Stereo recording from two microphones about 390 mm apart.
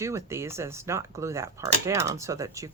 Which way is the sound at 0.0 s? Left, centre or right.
Centre.